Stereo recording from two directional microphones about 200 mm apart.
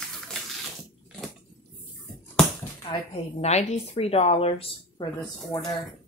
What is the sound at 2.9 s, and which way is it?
A woman's voice, 35° left (ahead or behind).